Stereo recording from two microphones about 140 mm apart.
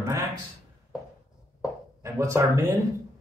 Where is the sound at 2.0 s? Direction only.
20° right (ahead or behind).